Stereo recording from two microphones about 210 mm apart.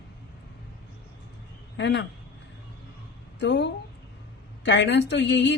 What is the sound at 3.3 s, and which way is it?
A woman's voice, 60° left (ahead or behind).